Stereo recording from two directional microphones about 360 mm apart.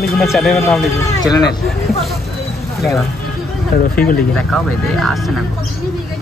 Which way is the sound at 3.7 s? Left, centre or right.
Left.